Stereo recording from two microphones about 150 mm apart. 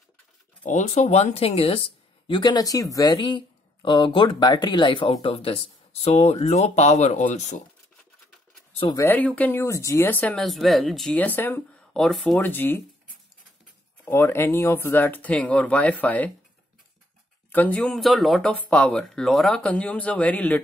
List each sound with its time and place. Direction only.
0.7 s speech: 55° left (ahead or behind)
8.9 s speech: 15° left (ahead or behind)
11.9 s speech: centre (ahead or behind)
14.0 s speech: 15° left (ahead or behind)
17.5 s speech: 10° left (ahead or behind)